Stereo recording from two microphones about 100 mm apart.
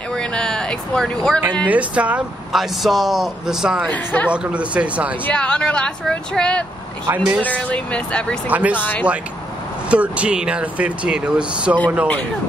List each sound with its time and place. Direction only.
0.1 s speech: 5° left (ahead or behind)
1.7 s speech: 15° right (ahead or behind)
2.5 s speech: centre (ahead or behind)
3.9 s speech: 15° left (ahead or behind)
4.3 s speech: 10° right (ahead or behind)
5.2 s speech: 10° left (ahead or behind)
7.1 s speech: 20° right (ahead or behind)
7.4 s speech: 10° left (ahead or behind)
8.5 s speech: 15° right (ahead or behind)
8.7 s speech: 20° left (ahead or behind)
9.8 s speech: 10° right (ahead or behind)